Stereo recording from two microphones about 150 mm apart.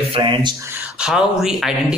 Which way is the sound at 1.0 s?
5° right (ahead or behind).